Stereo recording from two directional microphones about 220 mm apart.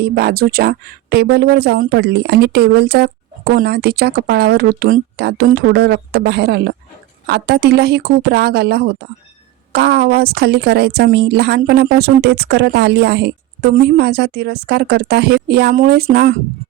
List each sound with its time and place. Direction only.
0.0 s a woman's voice: 45° right (ahead or behind)